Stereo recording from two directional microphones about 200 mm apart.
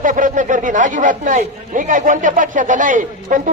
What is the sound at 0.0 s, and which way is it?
Speech, 40° right (ahead or behind).